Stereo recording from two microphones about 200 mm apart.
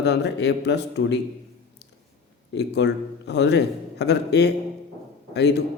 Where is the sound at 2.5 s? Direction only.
60° left (ahead or behind).